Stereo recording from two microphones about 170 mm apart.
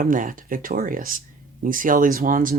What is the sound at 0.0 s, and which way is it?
Speech, 55° right (ahead or behind).